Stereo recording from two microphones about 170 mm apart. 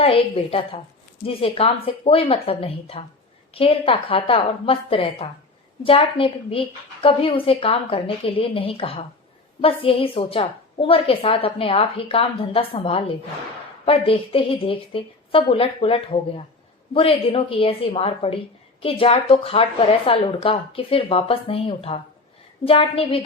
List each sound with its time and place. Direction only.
0.0 s a woman's voice: 35° left (ahead or behind)